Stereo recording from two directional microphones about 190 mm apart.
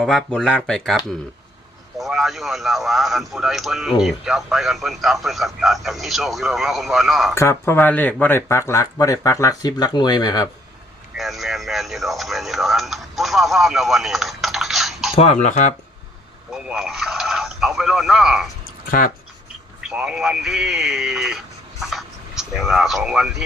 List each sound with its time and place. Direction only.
0.0 s a man's voice: centre (ahead or behind)
7.3 s speech: 15° left (ahead or behind)
11.2 s radio: centre (ahead or behind)
15.1 s speech: 35° left (ahead or behind)
16.5 s a sound: centre (ahead or behind)
18.9 s speech: 45° left (ahead or behind)
19.8 s speech: 5° right (ahead or behind)